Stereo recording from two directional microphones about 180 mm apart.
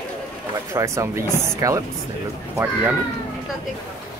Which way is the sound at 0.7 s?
15° right (ahead or behind).